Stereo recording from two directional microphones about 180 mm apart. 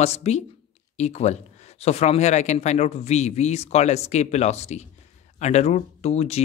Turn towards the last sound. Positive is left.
turn(degrees=35)  # may be behind; listen again after turning